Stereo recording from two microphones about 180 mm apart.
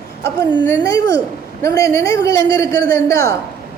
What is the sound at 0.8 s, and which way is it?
A woman's voice, 20° left (ahead or behind).